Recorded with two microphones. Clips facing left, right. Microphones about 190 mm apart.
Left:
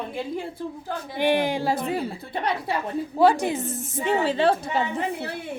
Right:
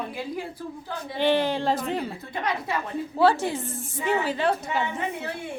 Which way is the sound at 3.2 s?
15° left (ahead or behind).